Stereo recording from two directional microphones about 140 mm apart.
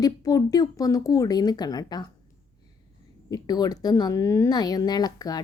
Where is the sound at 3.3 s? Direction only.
30° left (ahead or behind).